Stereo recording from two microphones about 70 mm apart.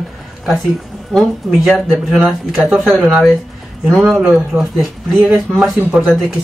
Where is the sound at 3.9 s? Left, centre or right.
Centre.